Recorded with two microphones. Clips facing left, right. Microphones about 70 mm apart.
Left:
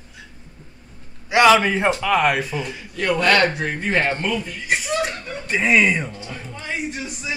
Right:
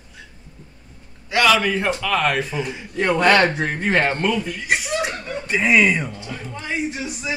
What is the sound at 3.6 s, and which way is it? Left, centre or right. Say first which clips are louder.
Speech: right 2 dB; right.